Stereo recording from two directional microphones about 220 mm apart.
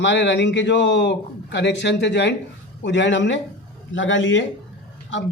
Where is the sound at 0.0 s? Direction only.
55° left (ahead or behind).